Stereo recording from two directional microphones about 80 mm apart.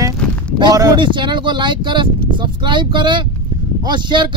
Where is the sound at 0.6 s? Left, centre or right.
Right.